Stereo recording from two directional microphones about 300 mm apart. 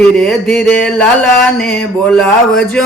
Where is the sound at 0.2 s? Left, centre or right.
Centre.